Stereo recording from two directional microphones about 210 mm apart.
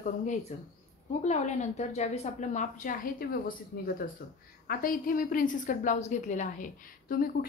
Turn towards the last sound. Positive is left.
turn(degrees=45)  # may be behind; listen again after turning